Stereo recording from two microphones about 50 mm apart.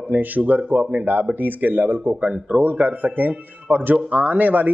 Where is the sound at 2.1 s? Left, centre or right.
Right.